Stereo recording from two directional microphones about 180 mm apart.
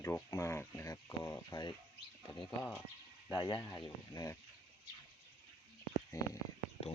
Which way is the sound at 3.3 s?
25° left (ahead or behind).